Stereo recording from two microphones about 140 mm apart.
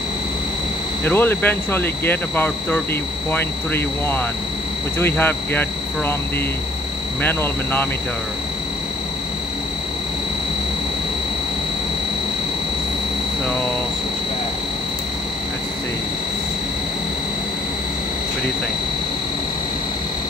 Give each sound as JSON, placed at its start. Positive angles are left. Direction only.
{"t": 1.0, "sound": "speech", "side_deg": 15}
{"t": 7.2, "sound": "speech", "side_deg": 15}